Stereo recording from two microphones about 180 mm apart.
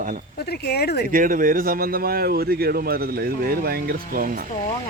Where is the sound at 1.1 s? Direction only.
50° right (ahead or behind).